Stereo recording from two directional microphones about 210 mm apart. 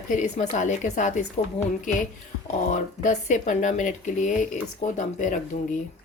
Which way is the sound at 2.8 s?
35° left (ahead or behind).